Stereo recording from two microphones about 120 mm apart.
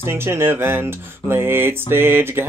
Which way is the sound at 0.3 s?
20° right (ahead or behind).